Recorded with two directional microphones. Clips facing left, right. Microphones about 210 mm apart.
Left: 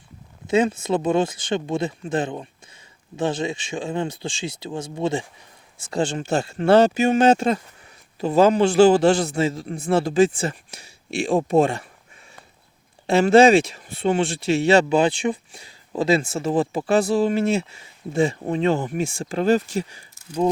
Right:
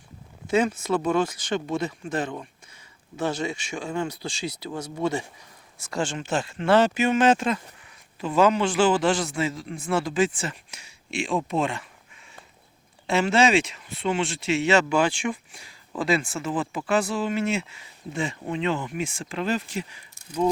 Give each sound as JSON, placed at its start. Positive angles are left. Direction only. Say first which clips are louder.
{"t": 0.4, "sound": "speech", "louder": "left 3 dB", "side_deg": 20}
{"t": 13.1, "sound": "speech", "louder": "left 7 dB", "side_deg": 35}